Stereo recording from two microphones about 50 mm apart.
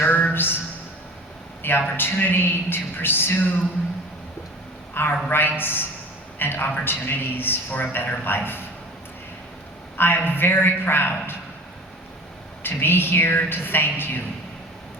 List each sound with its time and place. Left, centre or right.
0.0 s a sound: left
1.6 s a man's voice: left
4.9 s a man's voice: left
10.0 s a man's voice: left
12.6 s a man's voice: left